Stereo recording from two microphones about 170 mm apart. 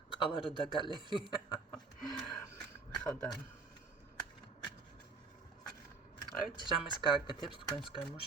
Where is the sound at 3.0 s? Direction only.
5° left (ahead or behind).